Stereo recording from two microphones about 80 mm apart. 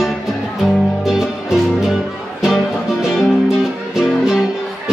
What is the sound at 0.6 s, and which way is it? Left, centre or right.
Music, centre.